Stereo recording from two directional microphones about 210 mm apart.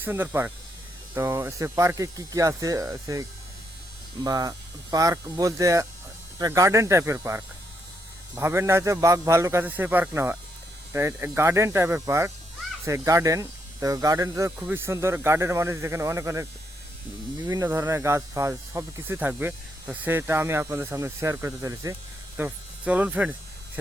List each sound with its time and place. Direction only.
0.0 s speech: 10° right (ahead or behind)